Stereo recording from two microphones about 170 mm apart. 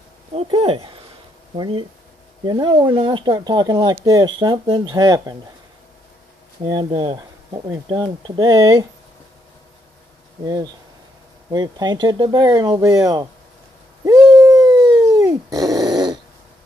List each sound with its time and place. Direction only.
0.3 s speech: 35° right (ahead or behind)
6.6 s speech: 30° right (ahead or behind)
10.4 s speech: 25° right (ahead or behind)
14.0 s dog: 20° right (ahead or behind)